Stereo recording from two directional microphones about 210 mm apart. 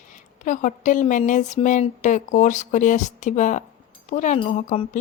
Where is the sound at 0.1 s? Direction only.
35° left (ahead or behind).